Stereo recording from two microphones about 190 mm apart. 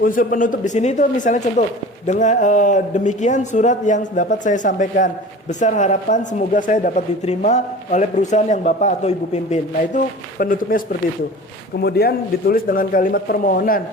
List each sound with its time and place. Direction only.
0.0 s speech: 45° left (ahead or behind)
10.3 s speech: 50° left (ahead or behind)
11.8 s speech: 55° left (ahead or behind)